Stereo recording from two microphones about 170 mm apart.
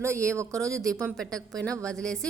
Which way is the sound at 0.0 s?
15° right (ahead or behind).